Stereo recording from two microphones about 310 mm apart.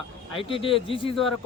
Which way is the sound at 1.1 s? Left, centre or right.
Centre.